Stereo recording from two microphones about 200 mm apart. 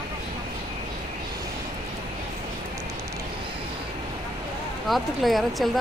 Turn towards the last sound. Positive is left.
turn(degrees=0)  # may be behind; listen again after turning